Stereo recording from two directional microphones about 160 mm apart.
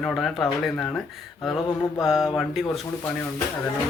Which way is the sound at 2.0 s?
5° right (ahead or behind).